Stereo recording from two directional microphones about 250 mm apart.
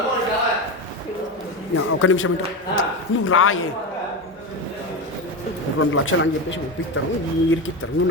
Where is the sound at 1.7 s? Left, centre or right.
Left.